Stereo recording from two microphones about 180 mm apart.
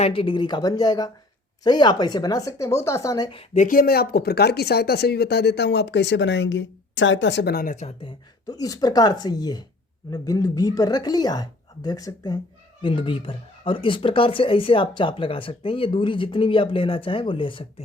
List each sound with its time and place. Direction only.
0.0 s speech: 30° left (ahead or behind)
3.3 s speech: 40° left (ahead or behind)
8.4 s speech: 20° left (ahead or behind)